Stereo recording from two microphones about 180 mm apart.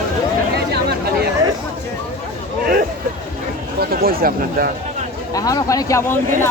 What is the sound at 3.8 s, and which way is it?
Speech, 55° right (ahead or behind).